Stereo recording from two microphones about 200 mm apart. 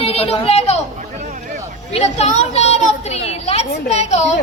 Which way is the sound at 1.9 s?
35° left (ahead or behind).